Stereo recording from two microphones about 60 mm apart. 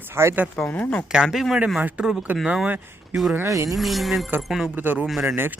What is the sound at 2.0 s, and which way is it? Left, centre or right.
Speech, centre.